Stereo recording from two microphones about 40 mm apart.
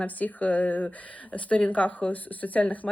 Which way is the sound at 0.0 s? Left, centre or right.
Left.